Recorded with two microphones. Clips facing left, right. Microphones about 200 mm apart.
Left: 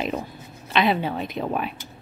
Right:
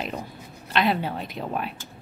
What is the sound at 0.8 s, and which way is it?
Speech, centre (ahead or behind).